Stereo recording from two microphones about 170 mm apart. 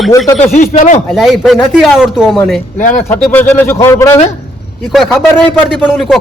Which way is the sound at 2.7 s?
45° left (ahead or behind).